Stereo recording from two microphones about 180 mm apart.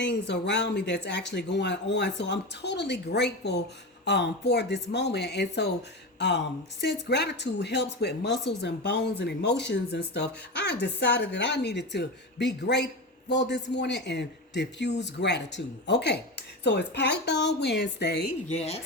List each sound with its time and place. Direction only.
0.0 s speech: 70° left (ahead or behind)
18.5 s speech: 35° left (ahead or behind)